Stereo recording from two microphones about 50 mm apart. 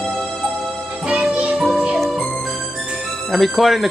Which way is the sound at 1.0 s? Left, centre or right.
Right.